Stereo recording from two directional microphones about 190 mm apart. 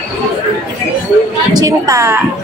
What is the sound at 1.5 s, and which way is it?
Speech, 15° right (ahead or behind).